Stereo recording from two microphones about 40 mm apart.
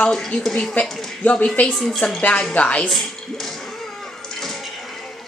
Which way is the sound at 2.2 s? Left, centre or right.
Left.